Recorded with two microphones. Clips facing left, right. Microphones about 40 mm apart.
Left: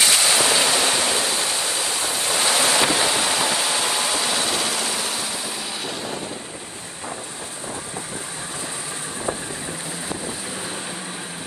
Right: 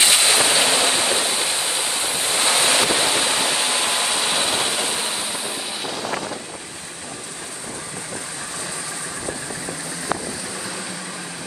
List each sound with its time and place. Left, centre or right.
0.0 s waves: right
1.4 s ocean: right
3.1 s vehicle: right
6.0 s wind noise: right